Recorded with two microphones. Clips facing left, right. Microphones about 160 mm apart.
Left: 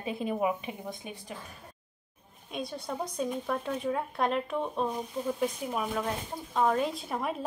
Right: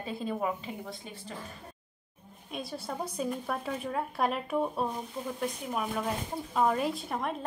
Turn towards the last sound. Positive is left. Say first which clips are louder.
# even
turn(degrees=0)  # may be behind; listen again after turning